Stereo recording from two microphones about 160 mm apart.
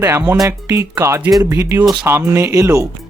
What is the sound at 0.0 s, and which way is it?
Speech, 15° right (ahead or behind).